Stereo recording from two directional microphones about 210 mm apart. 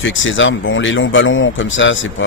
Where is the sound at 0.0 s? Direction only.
65° left (ahead or behind).